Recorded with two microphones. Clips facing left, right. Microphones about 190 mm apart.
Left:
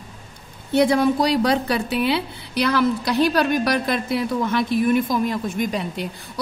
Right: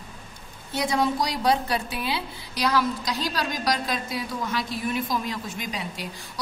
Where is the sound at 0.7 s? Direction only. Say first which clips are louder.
Left 8 dB; 60° left (ahead or behind).